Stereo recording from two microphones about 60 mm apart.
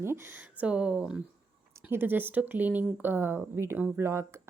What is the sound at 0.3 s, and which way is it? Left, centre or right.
Speech, right.